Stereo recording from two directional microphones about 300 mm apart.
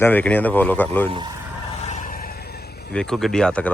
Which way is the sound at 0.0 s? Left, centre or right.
Centre.